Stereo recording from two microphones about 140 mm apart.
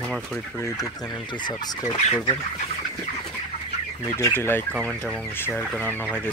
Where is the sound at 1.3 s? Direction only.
30° left (ahead or behind).